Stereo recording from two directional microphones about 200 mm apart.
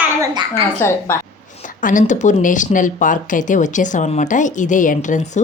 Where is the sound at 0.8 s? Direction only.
15° left (ahead or behind).